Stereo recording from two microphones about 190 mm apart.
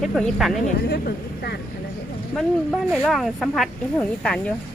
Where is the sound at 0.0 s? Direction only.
Centre (ahead or behind).